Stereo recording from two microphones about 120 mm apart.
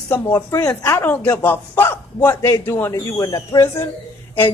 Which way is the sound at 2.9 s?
30° left (ahead or behind).